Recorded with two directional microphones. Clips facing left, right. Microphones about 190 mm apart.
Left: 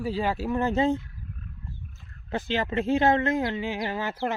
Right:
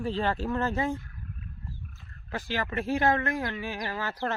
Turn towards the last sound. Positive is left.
turn(degrees=15)  # may be behind; listen again after turning